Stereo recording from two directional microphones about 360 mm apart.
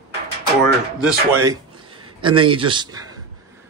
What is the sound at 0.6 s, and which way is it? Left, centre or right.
Speech, centre.